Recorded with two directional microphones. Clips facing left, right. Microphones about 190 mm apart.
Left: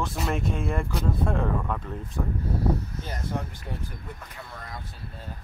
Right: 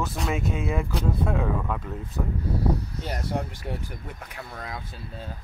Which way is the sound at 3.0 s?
70° right (ahead or behind).